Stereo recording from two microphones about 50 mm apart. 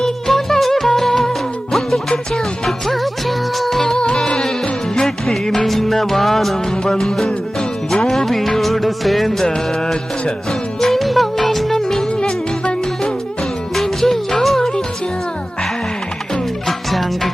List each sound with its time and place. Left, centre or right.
0.0 s music: centre
2.6 s music: centre
3.9 s music: centre
9.4 s music: centre
13.7 s music: centre
16.6 s music: centre